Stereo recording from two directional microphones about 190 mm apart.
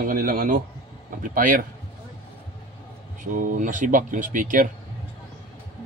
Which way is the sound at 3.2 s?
45° right (ahead or behind).